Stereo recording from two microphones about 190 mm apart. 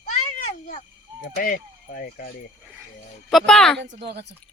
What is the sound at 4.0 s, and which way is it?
Speech, 60° right (ahead or behind).